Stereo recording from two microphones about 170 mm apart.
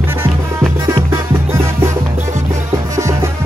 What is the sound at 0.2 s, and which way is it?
Music, 15° right (ahead or behind).